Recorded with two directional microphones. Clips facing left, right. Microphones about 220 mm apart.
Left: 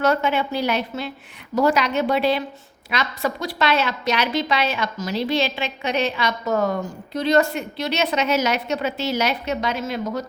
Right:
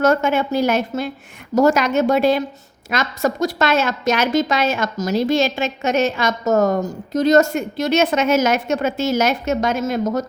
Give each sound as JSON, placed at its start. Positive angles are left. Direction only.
{"t": 0.0, "sound": "a woman's voice", "side_deg": -45}